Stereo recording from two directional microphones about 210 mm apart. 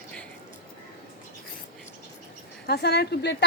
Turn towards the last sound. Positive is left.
turn(degrees=50)  # may be behind; listen again after turning